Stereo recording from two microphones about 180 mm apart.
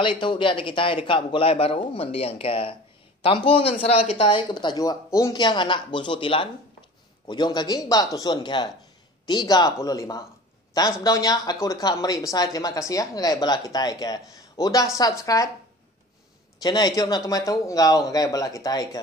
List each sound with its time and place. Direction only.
0.0 s speech: 25° left (ahead or behind)
16.6 s speech: 20° left (ahead or behind)